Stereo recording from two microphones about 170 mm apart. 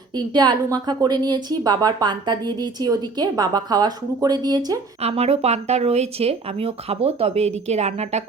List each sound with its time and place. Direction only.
0.2 s a woman's voice: 25° right (ahead or behind)
5.0 s speech: 35° right (ahead or behind)